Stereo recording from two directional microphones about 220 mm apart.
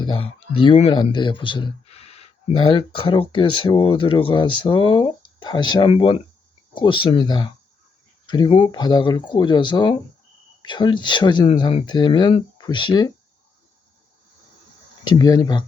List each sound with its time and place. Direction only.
0.0 s speech: 25° left (ahead or behind)
15.0 s speech: 20° left (ahead or behind)